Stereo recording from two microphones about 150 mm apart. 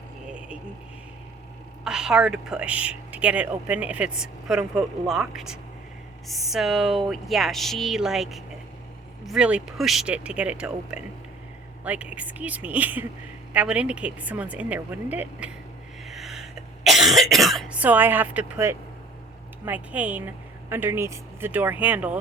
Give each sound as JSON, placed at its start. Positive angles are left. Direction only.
{"t": 1.8, "sound": "a woman's voice", "side_deg": -5}
{"t": 16.0, "sound": "cough", "side_deg": 0}
{"t": 17.7, "sound": "a woman's voice", "side_deg": -10}